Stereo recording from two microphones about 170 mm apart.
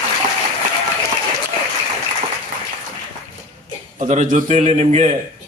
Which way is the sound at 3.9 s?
45° right (ahead or behind).